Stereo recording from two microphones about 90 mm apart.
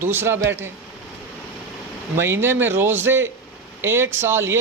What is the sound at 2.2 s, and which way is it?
Speech, 25° right (ahead or behind).